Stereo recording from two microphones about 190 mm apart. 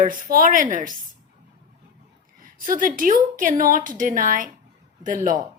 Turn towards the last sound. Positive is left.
turn(degrees=-45)  # may be behind; listen again after turning